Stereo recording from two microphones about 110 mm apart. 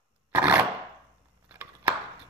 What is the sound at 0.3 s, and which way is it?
Chopping, 15° right (ahead or behind).